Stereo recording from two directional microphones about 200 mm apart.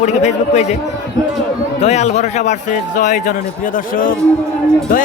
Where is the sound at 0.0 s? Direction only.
35° left (ahead or behind).